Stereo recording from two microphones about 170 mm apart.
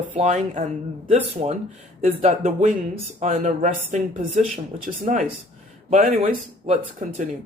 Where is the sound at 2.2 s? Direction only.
50° right (ahead or behind).